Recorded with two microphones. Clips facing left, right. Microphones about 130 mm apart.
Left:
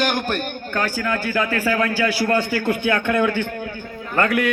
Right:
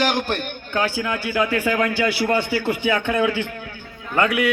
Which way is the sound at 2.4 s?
45° left (ahead or behind).